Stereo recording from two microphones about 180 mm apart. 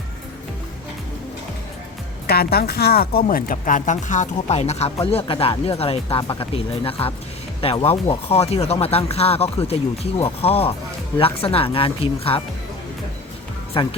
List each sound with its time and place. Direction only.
2.2 s speech: 60° left (ahead or behind); by 12.4 s 30° left (ahead or behind)
13.7 s speech: 30° left (ahead or behind)